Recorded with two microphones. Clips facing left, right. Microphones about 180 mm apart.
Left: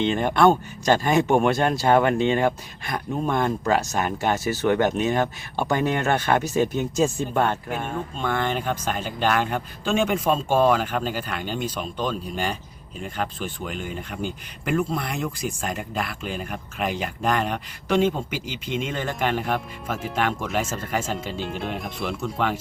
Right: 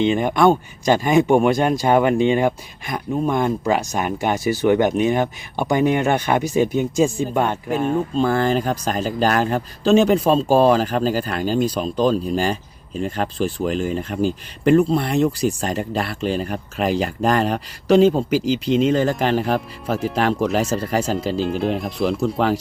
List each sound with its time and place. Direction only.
0.0 s speech: 10° right (ahead or behind)
8.1 s speech: 35° right (ahead or behind)
21.4 s speech: centre (ahead or behind)
22.0 s speech: 35° right (ahead or behind)